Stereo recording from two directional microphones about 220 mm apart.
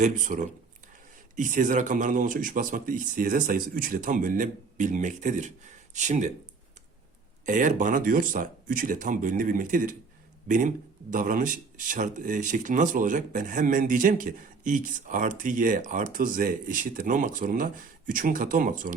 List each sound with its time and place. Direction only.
0.0 s speech: 35° right (ahead or behind)
7.4 s speech: 35° right (ahead or behind)
11.1 s speech: 40° right (ahead or behind)